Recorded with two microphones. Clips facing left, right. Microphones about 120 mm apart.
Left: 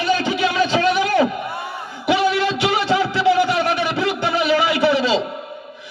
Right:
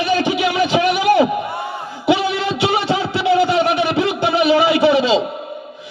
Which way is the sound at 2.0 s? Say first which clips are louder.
Right 1 dB; 25° right (ahead or behind).